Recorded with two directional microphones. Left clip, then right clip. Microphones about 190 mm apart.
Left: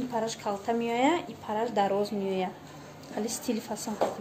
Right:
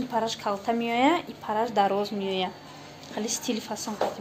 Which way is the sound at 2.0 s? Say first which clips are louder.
Right 2 dB; 5° right (ahead or behind).